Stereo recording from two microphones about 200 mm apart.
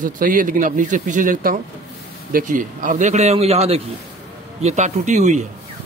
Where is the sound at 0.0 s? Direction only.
45° right (ahead or behind).